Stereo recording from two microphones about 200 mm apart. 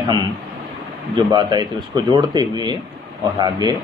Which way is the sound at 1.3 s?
20° right (ahead or behind).